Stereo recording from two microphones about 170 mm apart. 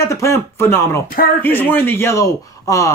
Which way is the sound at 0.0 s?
15° left (ahead or behind).